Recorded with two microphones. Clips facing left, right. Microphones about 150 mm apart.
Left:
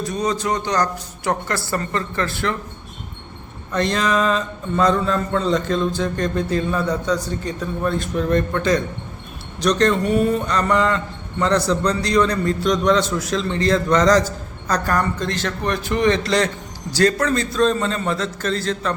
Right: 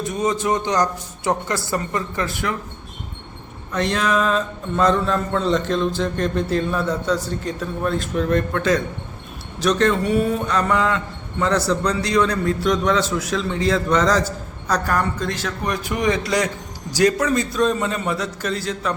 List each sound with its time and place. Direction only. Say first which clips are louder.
0.0 s a woman's voice: right 1 dB; 20° right (ahead or behind)
3.7 s a man's voice: left 1 dB; 5° right (ahead or behind)